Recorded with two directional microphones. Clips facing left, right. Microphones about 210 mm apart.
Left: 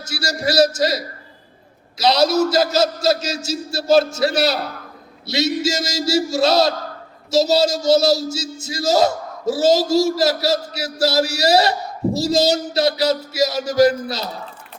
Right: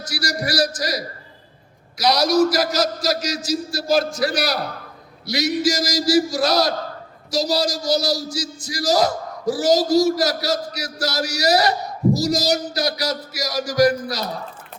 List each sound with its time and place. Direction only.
0.0 s speech: 25° left (ahead or behind)